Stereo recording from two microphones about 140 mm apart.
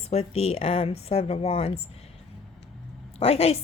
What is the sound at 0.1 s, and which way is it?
Speech, 45° left (ahead or behind).